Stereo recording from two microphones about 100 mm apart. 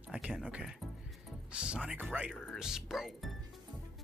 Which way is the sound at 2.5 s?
5° right (ahead or behind).